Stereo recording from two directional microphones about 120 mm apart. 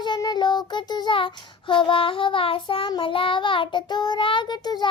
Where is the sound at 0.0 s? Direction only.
35° left (ahead or behind).